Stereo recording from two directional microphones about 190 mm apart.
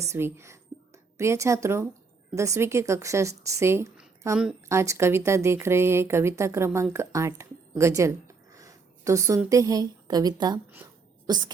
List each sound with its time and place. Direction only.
0.0 s a woman's voice: 15° right (ahead or behind)